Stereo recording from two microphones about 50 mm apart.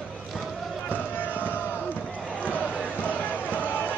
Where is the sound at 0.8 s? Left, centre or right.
Left.